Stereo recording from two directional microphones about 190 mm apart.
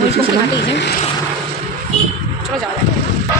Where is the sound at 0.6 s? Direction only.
65° left (ahead or behind).